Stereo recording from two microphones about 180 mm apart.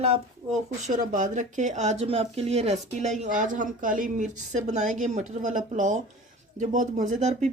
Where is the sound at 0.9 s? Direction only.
45° right (ahead or behind).